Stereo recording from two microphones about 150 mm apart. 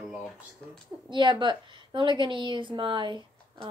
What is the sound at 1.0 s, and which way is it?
A woman's voice, 30° right (ahead or behind).